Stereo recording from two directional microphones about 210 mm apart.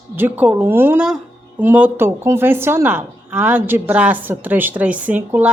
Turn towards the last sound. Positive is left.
turn(degrees=-5)  # may be behind; listen again after turning